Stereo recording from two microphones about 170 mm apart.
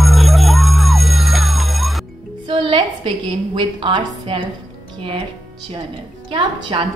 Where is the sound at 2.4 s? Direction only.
30° right (ahead or behind).